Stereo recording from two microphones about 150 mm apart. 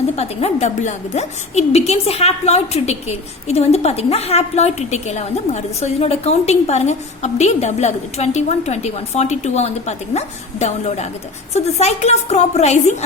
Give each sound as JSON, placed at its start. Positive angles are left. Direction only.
{"t": 0.2, "sound": "a woman's voice", "side_deg": 45}